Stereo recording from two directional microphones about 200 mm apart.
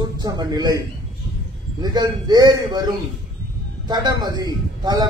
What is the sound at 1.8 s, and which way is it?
A man's voice, 20° right (ahead or behind).